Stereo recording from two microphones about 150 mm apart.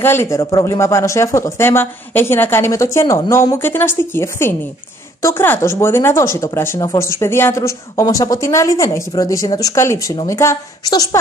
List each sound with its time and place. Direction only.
0.0 s speech: 15° left (ahead or behind)